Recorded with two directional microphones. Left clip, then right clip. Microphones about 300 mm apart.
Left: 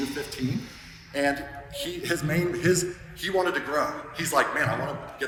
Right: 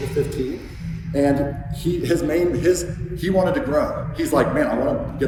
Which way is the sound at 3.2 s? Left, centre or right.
Centre.